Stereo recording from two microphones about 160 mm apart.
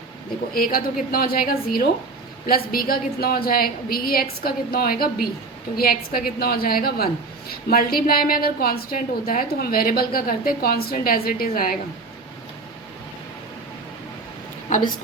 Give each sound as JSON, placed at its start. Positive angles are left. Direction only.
{"t": 0.5, "sound": "a woman's voice", "side_deg": 65}